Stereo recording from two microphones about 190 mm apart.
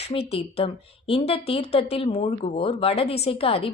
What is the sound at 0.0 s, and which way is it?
A woman's voice, 30° left (ahead or behind).